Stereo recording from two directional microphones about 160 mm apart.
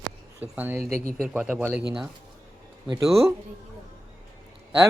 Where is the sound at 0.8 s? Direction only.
45° left (ahead or behind).